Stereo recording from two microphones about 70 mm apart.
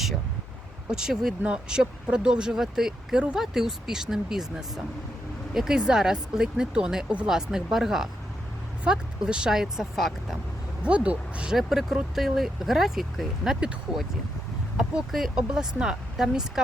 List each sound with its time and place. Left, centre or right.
0.9 s speech: centre
10.8 s speech: centre
11.5 s speech: centre
14.8 s speech: centre